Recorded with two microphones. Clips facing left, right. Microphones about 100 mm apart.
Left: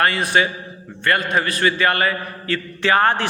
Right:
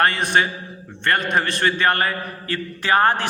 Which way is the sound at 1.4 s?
40° right (ahead or behind).